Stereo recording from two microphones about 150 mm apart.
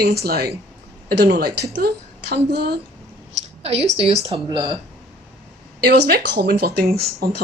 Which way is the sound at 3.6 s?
45° right (ahead or behind).